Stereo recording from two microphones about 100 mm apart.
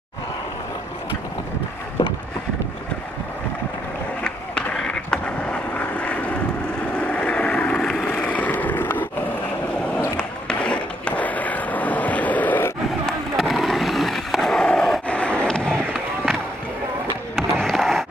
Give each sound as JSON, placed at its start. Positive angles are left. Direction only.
{"t": 4.2, "sound": "skateboard", "side_deg": 10}
{"t": 7.0, "sound": "vehicle", "side_deg": 15}
{"t": 8.2, "sound": "a sound", "side_deg": 15}
{"t": 9.9, "sound": "skateboard", "side_deg": 10}
{"t": 13.0, "sound": "skateboard", "side_deg": 0}
{"t": 17.4, "sound": "skateboard", "side_deg": 5}